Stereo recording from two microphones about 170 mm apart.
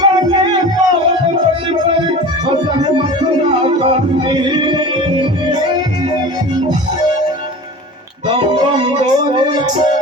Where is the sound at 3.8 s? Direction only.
30° right (ahead or behind).